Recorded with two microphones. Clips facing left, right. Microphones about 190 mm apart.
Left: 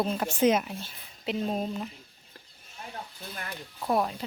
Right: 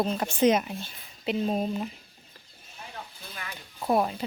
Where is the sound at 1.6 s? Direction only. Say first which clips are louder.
Right 3 dB; 15° right (ahead or behind).